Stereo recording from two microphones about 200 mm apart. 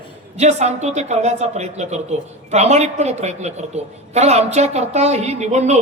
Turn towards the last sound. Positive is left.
turn(degrees=-35)  # may be behind; listen again after turning